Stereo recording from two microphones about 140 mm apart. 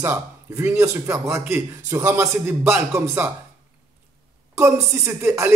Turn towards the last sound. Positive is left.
turn(degrees=-20)  # may be behind; listen again after turning